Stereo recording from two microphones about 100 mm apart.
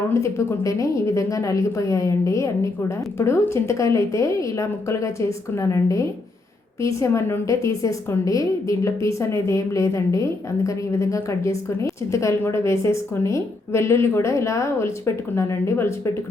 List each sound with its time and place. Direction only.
0.1 s a woman's voice: 30° left (ahead or behind)